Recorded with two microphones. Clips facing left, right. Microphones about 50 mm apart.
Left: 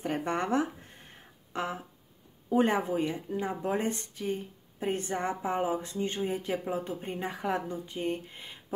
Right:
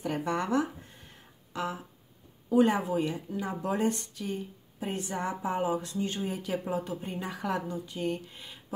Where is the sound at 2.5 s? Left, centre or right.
Left.